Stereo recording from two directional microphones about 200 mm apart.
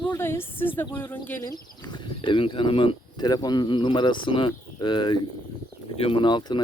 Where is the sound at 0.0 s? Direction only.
10° left (ahead or behind).